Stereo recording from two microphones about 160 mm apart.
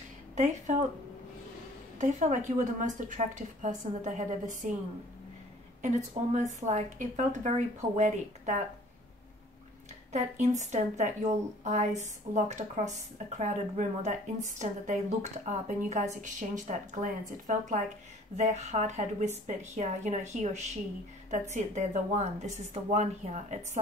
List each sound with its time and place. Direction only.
2.0 s speech: 50° right (ahead or behind)
10.6 s speech: 45° right (ahead or behind)